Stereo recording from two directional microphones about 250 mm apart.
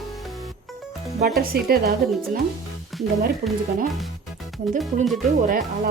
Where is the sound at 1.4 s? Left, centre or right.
Right.